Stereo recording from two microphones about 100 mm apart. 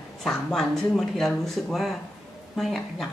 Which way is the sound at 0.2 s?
5° left (ahead or behind).